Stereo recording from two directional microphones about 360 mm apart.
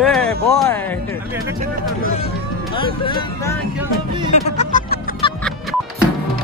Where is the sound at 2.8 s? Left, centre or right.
Centre.